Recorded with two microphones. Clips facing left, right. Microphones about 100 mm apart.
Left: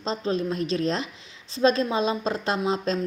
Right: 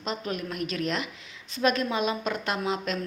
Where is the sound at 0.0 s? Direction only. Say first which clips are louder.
Left 6 dB; 30° left (ahead or behind).